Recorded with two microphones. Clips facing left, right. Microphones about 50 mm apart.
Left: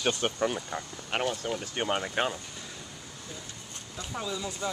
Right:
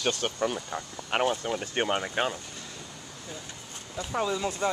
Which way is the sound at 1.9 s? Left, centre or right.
Centre.